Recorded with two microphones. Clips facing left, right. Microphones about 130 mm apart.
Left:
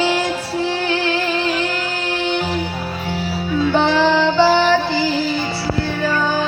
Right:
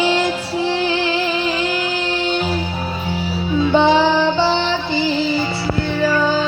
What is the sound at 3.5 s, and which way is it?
Music, 20° right (ahead or behind).